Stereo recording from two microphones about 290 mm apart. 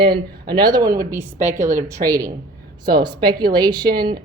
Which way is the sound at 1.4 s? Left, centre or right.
Right.